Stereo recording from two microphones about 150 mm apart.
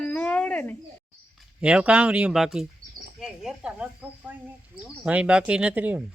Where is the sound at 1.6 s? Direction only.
5° right (ahead or behind).